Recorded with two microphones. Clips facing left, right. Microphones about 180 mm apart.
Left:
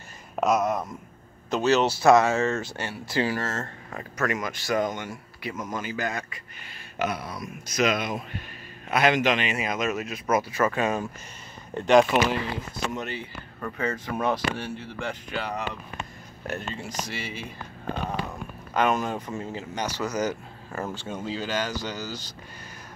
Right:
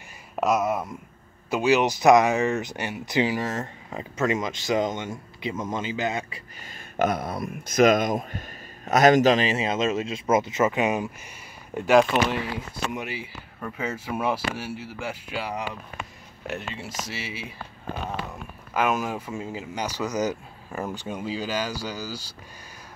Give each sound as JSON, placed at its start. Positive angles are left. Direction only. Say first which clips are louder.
{"t": 0.4, "sound": "speech", "louder": "even", "side_deg": 0}
{"t": 7.0, "sound": "speech", "louder": "right 5 dB", "side_deg": -50}
{"t": 11.7, "sound": "speech", "louder": "even", "side_deg": -5}
{"t": 18.7, "sound": "speech", "louder": "left 1 dB", "side_deg": -5}